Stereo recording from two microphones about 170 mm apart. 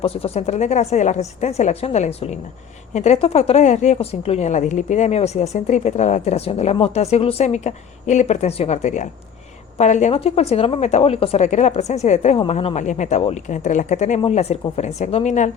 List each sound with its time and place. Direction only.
0.0 s a woman's voice: 35° left (ahead or behind)